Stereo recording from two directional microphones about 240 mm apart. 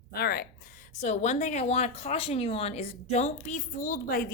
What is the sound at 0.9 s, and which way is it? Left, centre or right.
A woman's voice, left.